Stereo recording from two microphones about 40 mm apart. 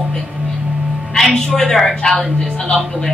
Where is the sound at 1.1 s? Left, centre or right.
Centre.